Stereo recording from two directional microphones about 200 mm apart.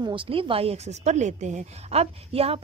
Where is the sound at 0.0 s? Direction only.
25° right (ahead or behind).